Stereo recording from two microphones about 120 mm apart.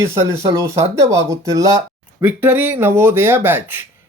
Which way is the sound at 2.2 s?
15° right (ahead or behind).